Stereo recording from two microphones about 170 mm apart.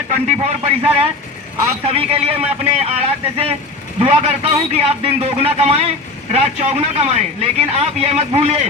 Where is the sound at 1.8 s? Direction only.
35° right (ahead or behind).